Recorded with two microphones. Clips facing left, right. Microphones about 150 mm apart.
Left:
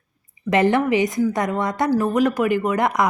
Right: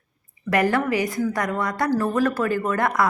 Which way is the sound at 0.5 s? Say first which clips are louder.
Left 3 dB; 20° left (ahead or behind).